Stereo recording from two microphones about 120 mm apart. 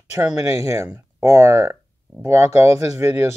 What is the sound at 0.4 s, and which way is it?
A man's voice, 25° right (ahead or behind).